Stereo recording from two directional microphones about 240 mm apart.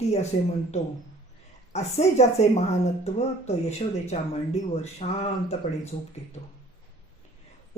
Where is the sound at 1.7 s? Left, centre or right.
Left.